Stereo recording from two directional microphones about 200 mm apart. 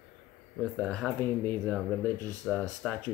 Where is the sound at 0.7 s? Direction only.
5° left (ahead or behind).